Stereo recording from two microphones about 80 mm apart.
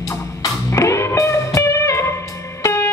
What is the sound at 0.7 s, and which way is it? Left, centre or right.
Music, left.